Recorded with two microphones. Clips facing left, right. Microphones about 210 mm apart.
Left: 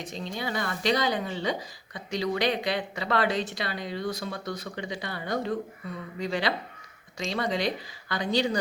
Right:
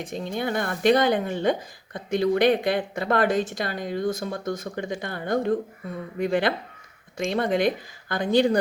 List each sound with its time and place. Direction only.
0.0 s speech: 50° right (ahead or behind)